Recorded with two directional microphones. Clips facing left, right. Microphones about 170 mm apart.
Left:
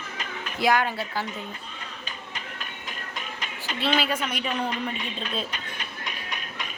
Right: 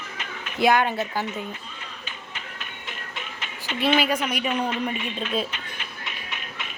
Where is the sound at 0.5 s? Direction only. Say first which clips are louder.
Right 3 dB; 25° right (ahead or behind).